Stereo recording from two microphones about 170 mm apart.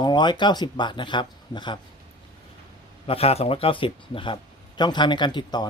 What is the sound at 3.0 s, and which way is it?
Speech, 35° left (ahead or behind).